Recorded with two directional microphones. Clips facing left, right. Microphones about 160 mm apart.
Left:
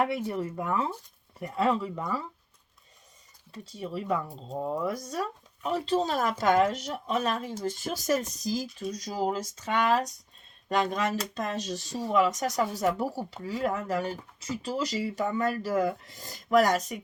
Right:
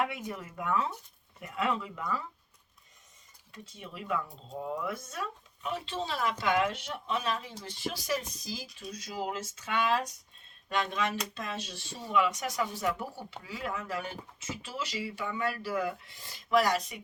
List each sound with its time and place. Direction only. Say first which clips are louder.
0.0 s speech: left 6 dB; 35° left (ahead or behind)
3.5 s speech: left 10 dB; 35° left (ahead or behind)